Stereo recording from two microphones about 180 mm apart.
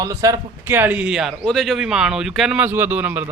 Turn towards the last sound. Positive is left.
turn(degrees=-10)  # may be behind; listen again after turning